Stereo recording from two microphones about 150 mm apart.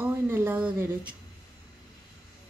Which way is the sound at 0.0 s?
15° right (ahead or behind).